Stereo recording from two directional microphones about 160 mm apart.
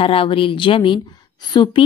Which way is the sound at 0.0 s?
35° left (ahead or behind).